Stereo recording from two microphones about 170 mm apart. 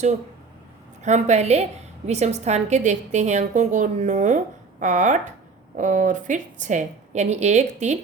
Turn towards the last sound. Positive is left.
turn(degrees=-45)  # may be behind; listen again after turning